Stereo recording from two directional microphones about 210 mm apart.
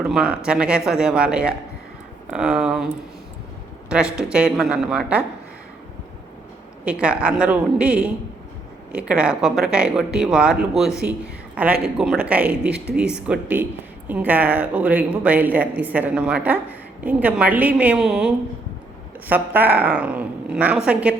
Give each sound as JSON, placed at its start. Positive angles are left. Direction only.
{"t": 0.0, "sound": "speech", "side_deg": 0}
{"t": 7.0, "sound": "speech", "side_deg": -5}
{"t": 12.7, "sound": "speech", "side_deg": -50}
{"t": 13.2, "sound": "speech", "side_deg": -5}